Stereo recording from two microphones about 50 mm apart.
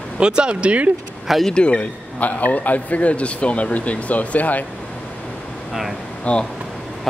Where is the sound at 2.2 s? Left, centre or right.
Left.